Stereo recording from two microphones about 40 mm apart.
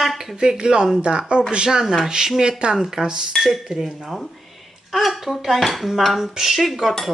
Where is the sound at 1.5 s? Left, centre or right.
Centre.